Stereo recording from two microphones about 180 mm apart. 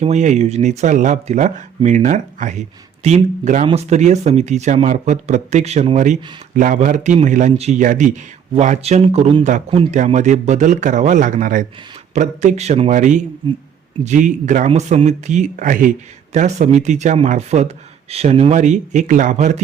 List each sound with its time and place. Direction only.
0.0 s speech: 40° right (ahead or behind)